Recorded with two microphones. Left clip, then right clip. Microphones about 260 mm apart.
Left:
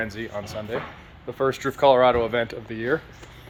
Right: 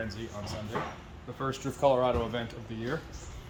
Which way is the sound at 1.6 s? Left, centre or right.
Centre.